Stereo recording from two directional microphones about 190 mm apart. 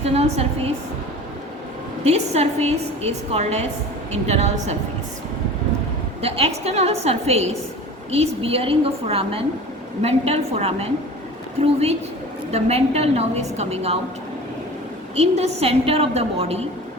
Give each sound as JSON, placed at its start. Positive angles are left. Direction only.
{"t": 0.0, "sound": "a woman's voice", "side_deg": -35}
{"t": 2.0, "sound": "a woman's voice", "side_deg": -35}
{"t": 6.2, "sound": "a woman's voice", "side_deg": -30}
{"t": 15.1, "sound": "a woman's voice", "side_deg": -35}